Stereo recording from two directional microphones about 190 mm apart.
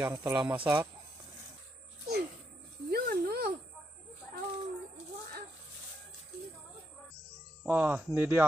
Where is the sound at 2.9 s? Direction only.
50° right (ahead or behind).